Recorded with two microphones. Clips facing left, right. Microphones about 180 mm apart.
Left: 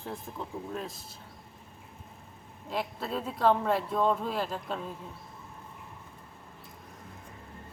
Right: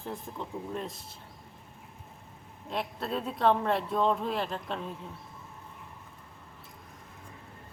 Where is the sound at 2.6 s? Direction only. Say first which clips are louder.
Even; centre (ahead or behind).